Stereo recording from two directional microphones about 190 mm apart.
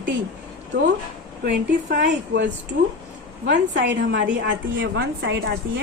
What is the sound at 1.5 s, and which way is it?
A woman's voice, 60° right (ahead or behind).